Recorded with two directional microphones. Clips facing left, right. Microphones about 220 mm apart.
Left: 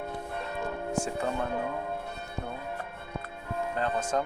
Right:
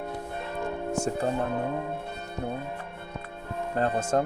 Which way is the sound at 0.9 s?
45° right (ahead or behind).